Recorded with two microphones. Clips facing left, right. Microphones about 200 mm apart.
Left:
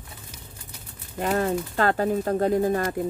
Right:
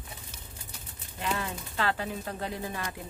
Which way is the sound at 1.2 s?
45° left (ahead or behind).